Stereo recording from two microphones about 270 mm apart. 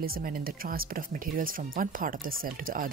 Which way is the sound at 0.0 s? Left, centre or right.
Right.